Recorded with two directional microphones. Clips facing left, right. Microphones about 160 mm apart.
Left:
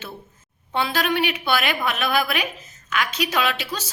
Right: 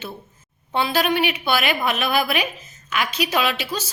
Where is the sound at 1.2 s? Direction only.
5° right (ahead or behind).